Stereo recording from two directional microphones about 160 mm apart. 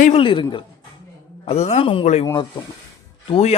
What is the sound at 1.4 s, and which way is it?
Speech, 40° left (ahead or behind).